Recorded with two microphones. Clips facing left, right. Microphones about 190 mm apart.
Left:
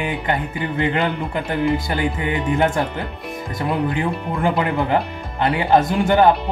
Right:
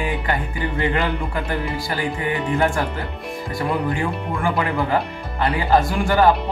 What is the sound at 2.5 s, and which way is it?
Speech, 20° left (ahead or behind).